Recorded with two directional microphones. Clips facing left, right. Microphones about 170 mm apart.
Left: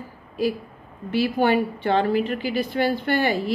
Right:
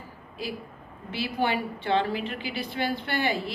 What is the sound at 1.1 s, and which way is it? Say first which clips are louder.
A woman's voice: left 8 dB; 50° left (ahead or behind).